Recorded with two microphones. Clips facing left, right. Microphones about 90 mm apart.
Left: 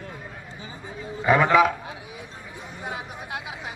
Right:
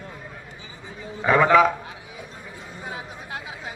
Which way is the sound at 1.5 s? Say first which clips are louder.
Right 2 dB; 15° left (ahead or behind).